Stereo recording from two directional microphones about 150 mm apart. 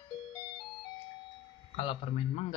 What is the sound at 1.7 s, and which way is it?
Speech, 40° left (ahead or behind).